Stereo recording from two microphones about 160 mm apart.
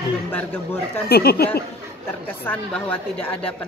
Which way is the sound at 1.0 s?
75° left (ahead or behind).